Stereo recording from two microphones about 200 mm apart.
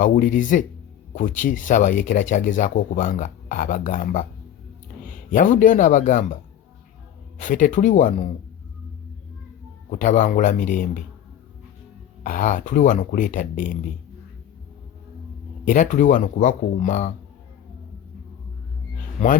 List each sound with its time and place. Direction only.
0.0 s a man's voice: 40° left (ahead or behind)
7.3 s speech: 40° left (ahead or behind)
9.9 s speech: 40° left (ahead or behind)
12.2 s speech: 40° left (ahead or behind)
15.6 s speech: 40° left (ahead or behind)